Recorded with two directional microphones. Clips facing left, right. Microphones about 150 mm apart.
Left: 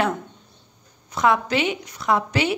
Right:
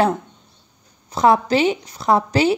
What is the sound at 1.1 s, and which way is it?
A woman's voice, 35° right (ahead or behind).